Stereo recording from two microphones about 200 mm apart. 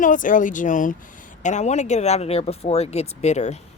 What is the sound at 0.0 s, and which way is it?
Speech, 40° left (ahead or behind).